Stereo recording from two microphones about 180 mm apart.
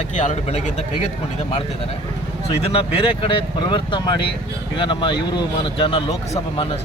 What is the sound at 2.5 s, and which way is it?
A man's voice, 30° left (ahead or behind).